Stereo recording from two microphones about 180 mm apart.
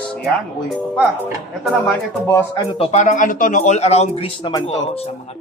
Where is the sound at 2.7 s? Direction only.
35° left (ahead or behind).